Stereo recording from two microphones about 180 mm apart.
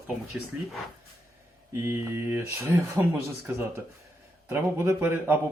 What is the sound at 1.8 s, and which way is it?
Speech, 15° right (ahead or behind).